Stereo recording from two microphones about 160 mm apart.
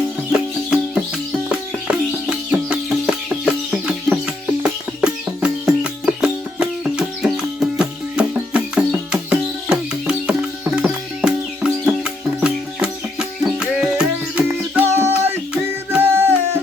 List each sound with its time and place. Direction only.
0.3 s music: 5° right (ahead or behind)
14.4 s music: 15° right (ahead or behind)